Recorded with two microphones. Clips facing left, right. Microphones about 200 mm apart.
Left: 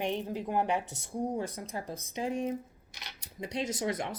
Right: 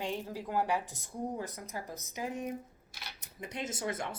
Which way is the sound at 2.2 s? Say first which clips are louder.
Left 5 dB; 25° left (ahead or behind).